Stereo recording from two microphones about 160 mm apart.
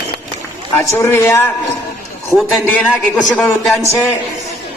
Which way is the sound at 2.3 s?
Centre (ahead or behind).